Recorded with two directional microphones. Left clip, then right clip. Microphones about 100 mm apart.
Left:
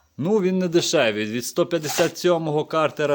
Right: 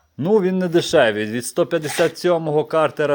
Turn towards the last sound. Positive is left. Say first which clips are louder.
# right 3 dB
turn(degrees=10)  # may be behind; listen again after turning